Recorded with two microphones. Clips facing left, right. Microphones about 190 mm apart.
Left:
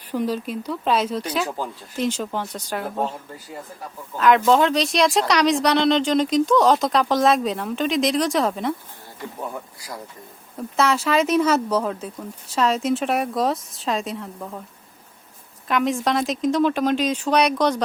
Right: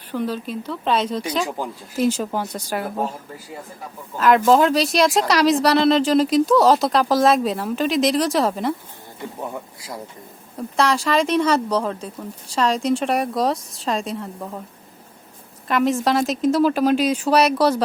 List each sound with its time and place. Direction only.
0.1 s speech: 10° left (ahead or behind)
1.5 s speech: 10° right (ahead or behind)
4.2 s speech: 5° right (ahead or behind)
9.4 s speech: 20° right (ahead or behind)
10.8 s speech: 5° left (ahead or behind)
15.6 s speech: centre (ahead or behind)